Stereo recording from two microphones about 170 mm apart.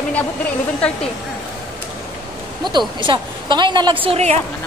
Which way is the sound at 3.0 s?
30° right (ahead or behind).